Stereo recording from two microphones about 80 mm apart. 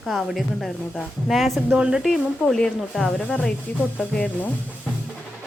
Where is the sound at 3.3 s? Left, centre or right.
Centre.